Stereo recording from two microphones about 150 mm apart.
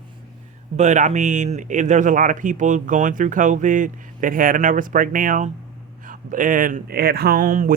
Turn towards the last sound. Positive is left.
turn(degrees=-70)  # may be behind; listen again after turning